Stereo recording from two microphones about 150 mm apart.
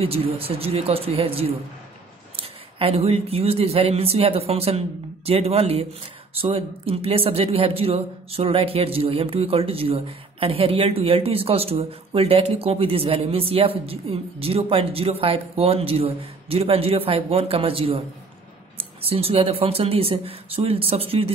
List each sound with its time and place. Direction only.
0.0 s speech: 40° right (ahead or behind)